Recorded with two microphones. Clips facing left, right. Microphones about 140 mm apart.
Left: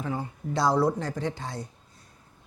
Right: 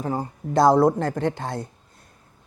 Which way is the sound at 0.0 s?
40° right (ahead or behind).